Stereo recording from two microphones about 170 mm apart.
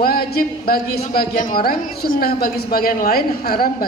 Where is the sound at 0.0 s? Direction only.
65° left (ahead or behind).